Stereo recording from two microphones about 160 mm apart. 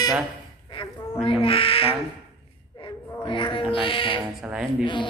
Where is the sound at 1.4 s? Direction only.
35° left (ahead or behind).